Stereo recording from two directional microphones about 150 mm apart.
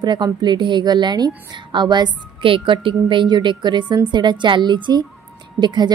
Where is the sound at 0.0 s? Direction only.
30° right (ahead or behind).